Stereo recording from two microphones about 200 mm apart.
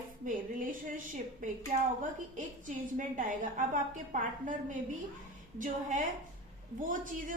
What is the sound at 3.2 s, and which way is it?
A woman's voice, 40° right (ahead or behind).